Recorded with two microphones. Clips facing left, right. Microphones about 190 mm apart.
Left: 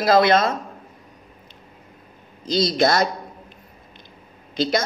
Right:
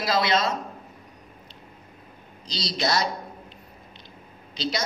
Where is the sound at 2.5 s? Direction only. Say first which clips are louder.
Left 9 dB; 50° left (ahead or behind).